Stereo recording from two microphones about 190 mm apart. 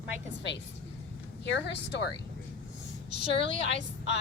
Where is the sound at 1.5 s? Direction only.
70° left (ahead or behind).